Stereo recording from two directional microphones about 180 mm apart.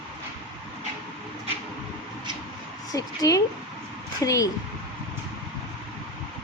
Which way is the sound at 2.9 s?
20° left (ahead or behind).